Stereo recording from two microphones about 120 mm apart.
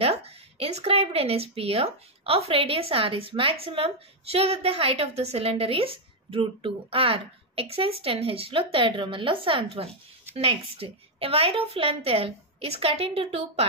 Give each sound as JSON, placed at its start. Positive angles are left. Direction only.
{"t": 0.0, "sound": "speech", "side_deg": -55}